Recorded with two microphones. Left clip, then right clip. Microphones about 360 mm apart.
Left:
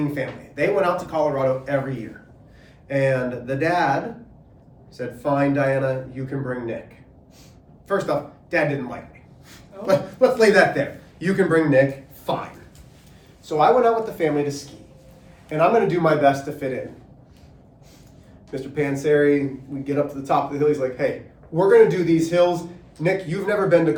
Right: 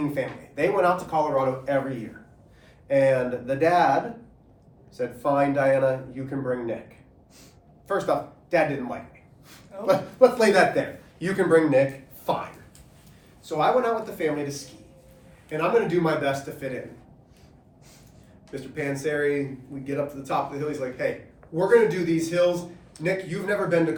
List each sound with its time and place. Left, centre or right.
0.1 s speech: centre
4.9 s speech: centre
7.9 s speech: centre
13.4 s speech: centre
18.5 s speech: centre